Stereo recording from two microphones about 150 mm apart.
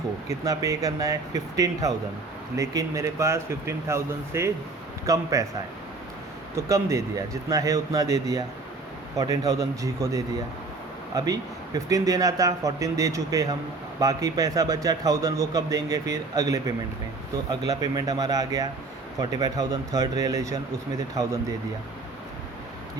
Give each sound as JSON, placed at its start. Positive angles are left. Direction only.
{"t": 0.3, "sound": "speech", "side_deg": -20}
{"t": 6.6, "sound": "speech", "side_deg": -20}